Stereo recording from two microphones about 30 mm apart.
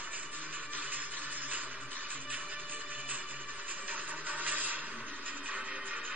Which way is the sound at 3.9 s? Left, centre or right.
Right.